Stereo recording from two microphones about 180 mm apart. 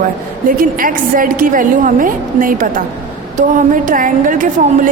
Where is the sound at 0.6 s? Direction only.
50° right (ahead or behind).